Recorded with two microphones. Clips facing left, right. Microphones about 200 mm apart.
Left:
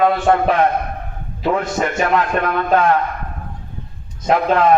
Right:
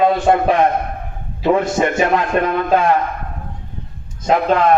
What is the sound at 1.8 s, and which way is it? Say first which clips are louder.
A man's voice: right 2 dB; 15° right (ahead or behind).